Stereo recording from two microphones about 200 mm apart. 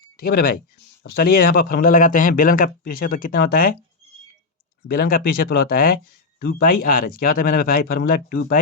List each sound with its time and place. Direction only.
0.2 s speech: 50° left (ahead or behind)
4.9 s speech: 45° left (ahead or behind)